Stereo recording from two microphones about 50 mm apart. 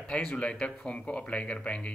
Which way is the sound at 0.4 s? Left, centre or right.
Left.